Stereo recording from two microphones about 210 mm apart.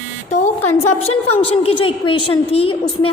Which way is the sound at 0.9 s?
30° left (ahead or behind).